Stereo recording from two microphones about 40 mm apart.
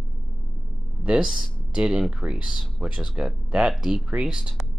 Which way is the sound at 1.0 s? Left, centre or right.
Right.